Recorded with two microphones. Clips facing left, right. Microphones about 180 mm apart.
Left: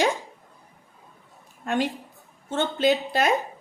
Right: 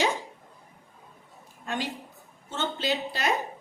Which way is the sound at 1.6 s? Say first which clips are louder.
Left 7 dB; 55° left (ahead or behind).